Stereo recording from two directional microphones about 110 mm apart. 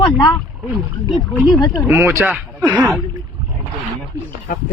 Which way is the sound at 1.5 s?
40° left (ahead or behind).